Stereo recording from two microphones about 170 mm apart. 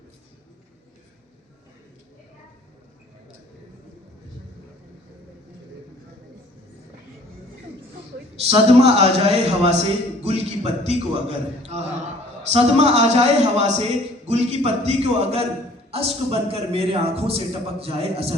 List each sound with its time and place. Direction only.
8.4 s a man's voice: 35° right (ahead or behind)
10.2 s a sound: 35° right (ahead or behind)
11.6 s a man's voice: 40° right (ahead or behind)